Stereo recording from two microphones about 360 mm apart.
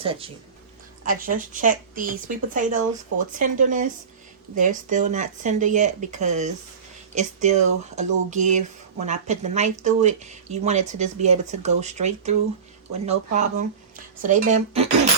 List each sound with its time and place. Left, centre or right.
0.0 s speech: centre